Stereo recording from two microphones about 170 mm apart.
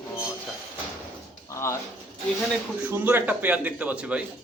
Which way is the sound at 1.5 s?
15° left (ahead or behind).